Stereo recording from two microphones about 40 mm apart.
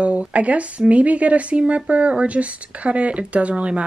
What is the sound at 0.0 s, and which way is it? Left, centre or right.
Speech, right.